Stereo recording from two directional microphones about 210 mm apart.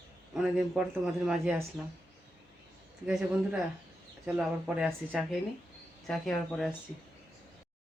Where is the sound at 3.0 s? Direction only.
5° right (ahead or behind).